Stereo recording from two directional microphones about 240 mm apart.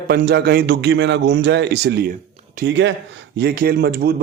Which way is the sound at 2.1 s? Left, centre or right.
Right.